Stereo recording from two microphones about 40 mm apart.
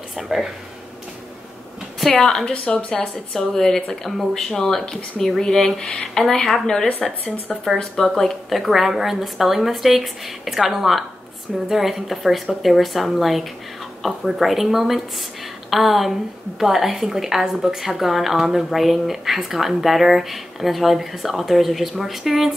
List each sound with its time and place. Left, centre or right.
0.2 s a woman's voice: centre
2.0 s speech: centre
2.5 s speech: left
2.9 s speech: centre
5.8 s speech: left
6.1 s a woman's voice: centre